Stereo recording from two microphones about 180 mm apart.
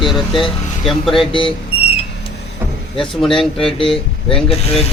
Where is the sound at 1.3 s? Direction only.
30° left (ahead or behind).